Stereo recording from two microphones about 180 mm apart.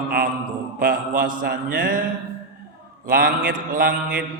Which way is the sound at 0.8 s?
50° right (ahead or behind).